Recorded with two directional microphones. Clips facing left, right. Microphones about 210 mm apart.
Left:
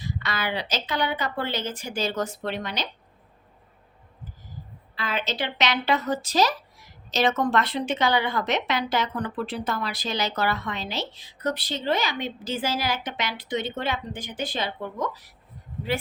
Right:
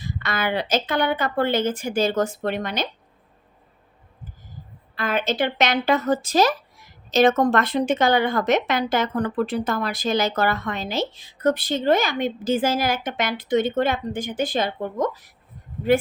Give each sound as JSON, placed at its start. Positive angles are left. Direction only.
{"t": 0.0, "sound": "speech", "side_deg": -50}
{"t": 4.9, "sound": "speech", "side_deg": -50}